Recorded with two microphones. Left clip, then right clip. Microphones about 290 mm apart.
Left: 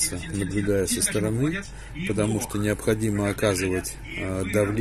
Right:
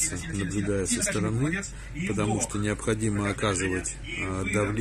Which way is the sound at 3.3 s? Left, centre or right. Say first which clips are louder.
Left 5 dB; centre.